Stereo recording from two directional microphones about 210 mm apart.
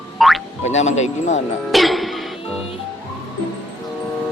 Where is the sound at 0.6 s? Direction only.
35° left (ahead or behind).